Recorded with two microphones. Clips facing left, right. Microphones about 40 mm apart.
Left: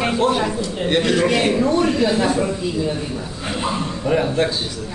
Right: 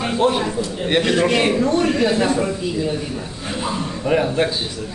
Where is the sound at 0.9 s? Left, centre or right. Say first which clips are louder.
Even; centre.